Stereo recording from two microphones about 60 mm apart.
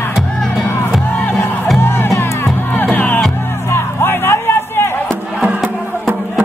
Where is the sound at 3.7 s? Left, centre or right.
Left.